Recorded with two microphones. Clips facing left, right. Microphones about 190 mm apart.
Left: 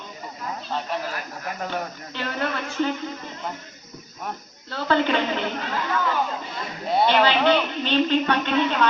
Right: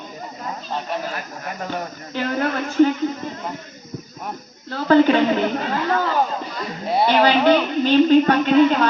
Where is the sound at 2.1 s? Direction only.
45° right (ahead or behind).